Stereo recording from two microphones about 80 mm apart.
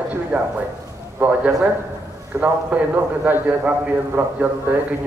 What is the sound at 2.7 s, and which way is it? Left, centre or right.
A man's voice, centre.